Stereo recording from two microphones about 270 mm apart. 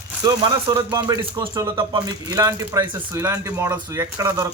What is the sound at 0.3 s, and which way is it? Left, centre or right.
Speech, centre.